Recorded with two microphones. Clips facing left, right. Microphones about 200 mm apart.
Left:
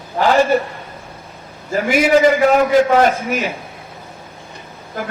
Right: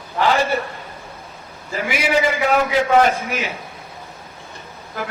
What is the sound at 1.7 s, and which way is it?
A man's voice, 45° left (ahead or behind).